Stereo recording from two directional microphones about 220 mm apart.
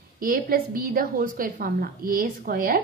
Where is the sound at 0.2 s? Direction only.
40° right (ahead or behind).